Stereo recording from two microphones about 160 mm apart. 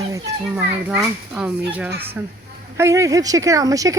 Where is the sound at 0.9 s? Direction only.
5° right (ahead or behind).